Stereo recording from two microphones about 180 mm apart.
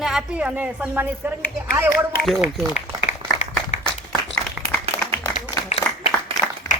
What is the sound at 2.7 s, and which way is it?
Applause, 40° left (ahead or behind).